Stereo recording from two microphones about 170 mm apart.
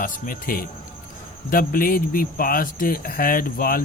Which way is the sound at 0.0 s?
50° left (ahead or behind).